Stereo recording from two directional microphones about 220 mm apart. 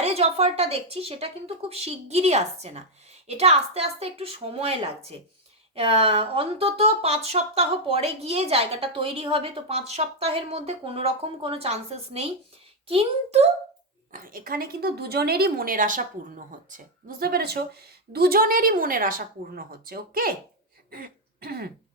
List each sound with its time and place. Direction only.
0.0 s a woman's voice: 25° right (ahead or behind)
14.1 s a woman's voice: 40° right (ahead or behind)
20.9 s throat clearing: 45° right (ahead or behind)